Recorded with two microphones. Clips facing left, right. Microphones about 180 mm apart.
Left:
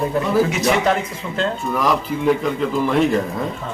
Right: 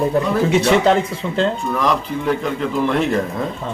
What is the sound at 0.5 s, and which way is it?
Speech, 30° right (ahead or behind).